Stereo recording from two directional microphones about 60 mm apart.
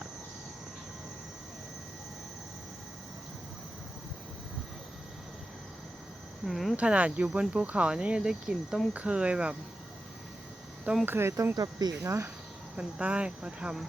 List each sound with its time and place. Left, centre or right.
6.4 s a sound: centre
6.7 s speech: right
8.9 s speech: right
11.0 s speech: right
11.5 s speech: right
12.0 s speech: right
12.7 s speech: right